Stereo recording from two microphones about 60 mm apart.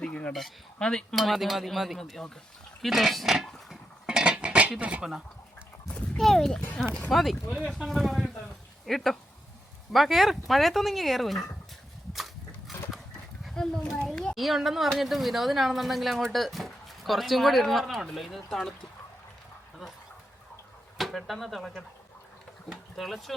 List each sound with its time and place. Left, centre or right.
0.0 s dishes: centre
0.8 s speech: centre
1.2 s speech: centre
4.0 s a sound: centre
4.8 s speech: right
6.1 s speech: centre
12.1 s a sound: centre
13.5 s a child's voice: centre
14.3 s speech: centre
21.0 s speech: centre